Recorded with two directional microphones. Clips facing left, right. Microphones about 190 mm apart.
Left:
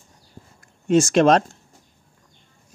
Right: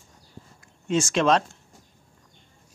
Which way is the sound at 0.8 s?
45° left (ahead or behind).